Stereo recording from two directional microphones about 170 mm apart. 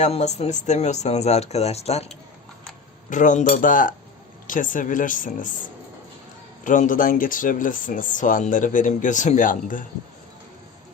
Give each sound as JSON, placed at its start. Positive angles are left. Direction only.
{"t": 0.0, "sound": "speech", "side_deg": 40}
{"t": 3.1, "sound": "speech", "side_deg": 50}
{"t": 6.7, "sound": "speech", "side_deg": 50}